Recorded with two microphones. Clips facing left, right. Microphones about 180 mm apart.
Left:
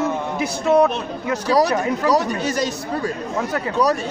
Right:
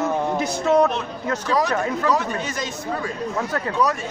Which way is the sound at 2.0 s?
35° left (ahead or behind).